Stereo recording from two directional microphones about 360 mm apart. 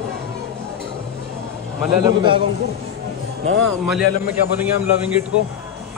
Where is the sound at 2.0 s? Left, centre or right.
Centre.